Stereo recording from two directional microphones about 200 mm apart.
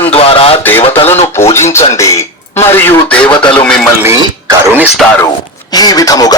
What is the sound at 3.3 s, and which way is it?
Speech, 25° left (ahead or behind).